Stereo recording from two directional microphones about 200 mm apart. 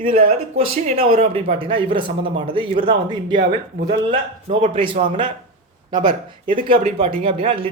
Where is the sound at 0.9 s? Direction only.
30° right (ahead or behind).